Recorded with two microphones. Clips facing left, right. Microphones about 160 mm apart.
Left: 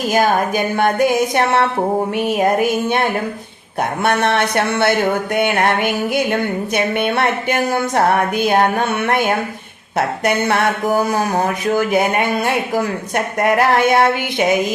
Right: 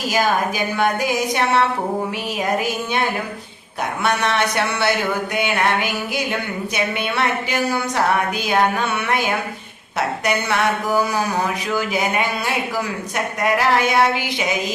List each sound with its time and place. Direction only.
0.1 s speech: 55° left (ahead or behind)
4.0 s speech: 55° left (ahead or behind)
10.2 s a sound: 55° left (ahead or behind)